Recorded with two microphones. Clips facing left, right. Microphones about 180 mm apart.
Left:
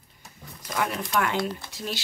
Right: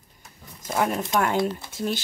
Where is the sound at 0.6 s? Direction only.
25° right (ahead or behind).